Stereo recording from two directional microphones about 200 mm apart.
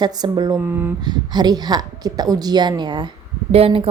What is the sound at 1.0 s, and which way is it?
A woman's voice, 20° right (ahead or behind).